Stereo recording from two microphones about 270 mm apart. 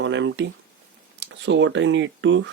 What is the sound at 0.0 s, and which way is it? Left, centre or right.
Speech, right.